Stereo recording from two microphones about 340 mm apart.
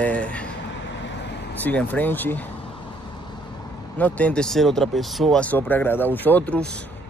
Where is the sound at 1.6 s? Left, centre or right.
Centre.